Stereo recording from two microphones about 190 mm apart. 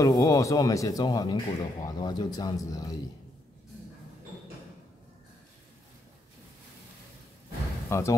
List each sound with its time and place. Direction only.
0.0 s speech: 15° left (ahead or behind)
7.9 s speech: 15° left (ahead or behind)